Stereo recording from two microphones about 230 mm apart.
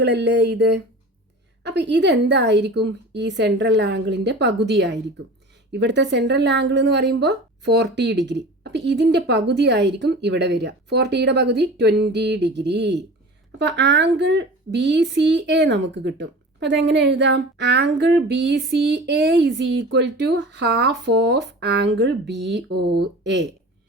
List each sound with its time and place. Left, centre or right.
0.0 s speech: right